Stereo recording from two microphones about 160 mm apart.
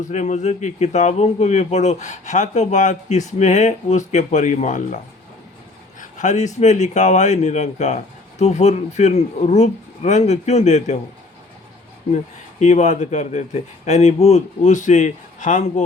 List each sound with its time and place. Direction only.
0.0 s a man's voice: 45° left (ahead or behind)
6.0 s a man's voice: 50° left (ahead or behind)
12.1 s a man's voice: 45° left (ahead or behind)